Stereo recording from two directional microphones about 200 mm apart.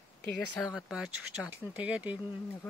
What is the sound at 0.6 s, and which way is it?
Speech, centre (ahead or behind).